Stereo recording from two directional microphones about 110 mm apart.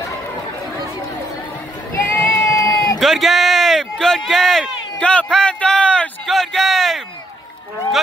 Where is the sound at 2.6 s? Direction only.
30° left (ahead or behind).